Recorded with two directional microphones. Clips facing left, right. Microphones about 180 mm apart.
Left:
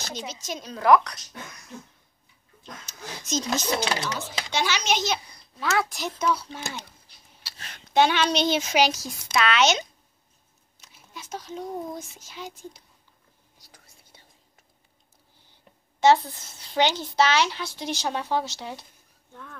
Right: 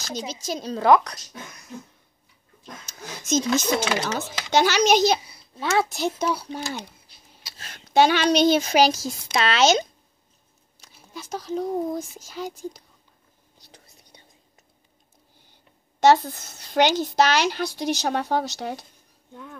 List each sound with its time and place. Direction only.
0.1 s a woman's voice: 35° right (ahead or behind)
2.9 s a woman's voice: 50° right (ahead or behind)
5.6 s a woman's voice: 25° right (ahead or behind)
13.6 s whispering: 25° right (ahead or behind)
16.0 s speech: 40° right (ahead or behind)